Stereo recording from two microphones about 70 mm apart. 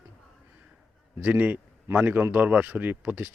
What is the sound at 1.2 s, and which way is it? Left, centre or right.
A man's voice, right.